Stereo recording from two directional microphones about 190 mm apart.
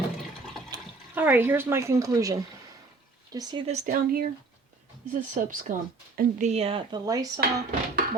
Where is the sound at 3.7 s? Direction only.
45° right (ahead or behind).